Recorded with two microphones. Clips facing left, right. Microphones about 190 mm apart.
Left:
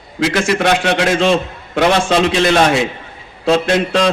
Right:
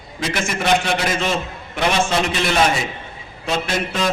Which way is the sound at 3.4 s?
70° left (ahead or behind).